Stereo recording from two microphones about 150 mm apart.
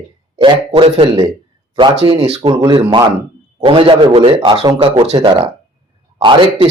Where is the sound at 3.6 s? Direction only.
35° right (ahead or behind).